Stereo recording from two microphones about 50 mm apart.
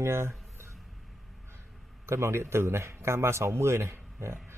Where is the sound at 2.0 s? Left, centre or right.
Right.